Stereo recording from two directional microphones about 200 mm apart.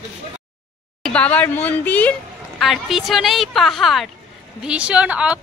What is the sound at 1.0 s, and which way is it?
A woman's voice, 5° left (ahead or behind).